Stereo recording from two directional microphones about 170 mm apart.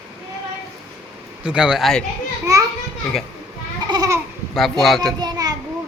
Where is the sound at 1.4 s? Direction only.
5° right (ahead or behind).